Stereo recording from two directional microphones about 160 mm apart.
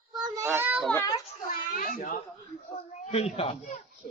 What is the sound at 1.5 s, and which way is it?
Children playing, 55° left (ahead or behind).